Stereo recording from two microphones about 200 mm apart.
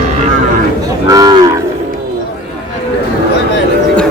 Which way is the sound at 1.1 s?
20° right (ahead or behind).